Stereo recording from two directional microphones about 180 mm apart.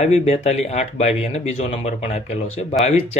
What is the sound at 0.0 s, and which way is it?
Speech, 40° left (ahead or behind).